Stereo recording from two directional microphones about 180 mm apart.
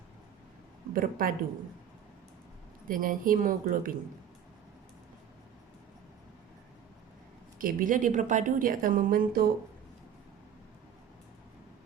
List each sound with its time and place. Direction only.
0.9 s a woman's voice: 50° right (ahead or behind)
2.8 s a woman's voice: 50° right (ahead or behind)
7.6 s a woman's voice: 50° right (ahead or behind)